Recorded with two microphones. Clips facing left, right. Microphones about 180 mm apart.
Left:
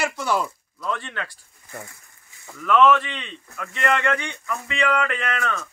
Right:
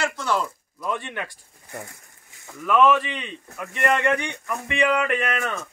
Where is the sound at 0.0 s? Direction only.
10° left (ahead or behind).